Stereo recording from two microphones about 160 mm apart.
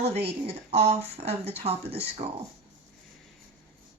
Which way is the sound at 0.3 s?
40° right (ahead or behind).